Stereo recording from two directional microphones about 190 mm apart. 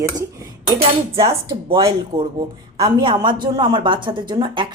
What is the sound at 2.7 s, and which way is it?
A woman's voice, 25° right (ahead or behind).